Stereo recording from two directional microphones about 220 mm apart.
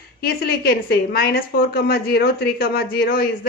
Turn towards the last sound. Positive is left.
turn(degrees=40)  # may be behind; listen again after turning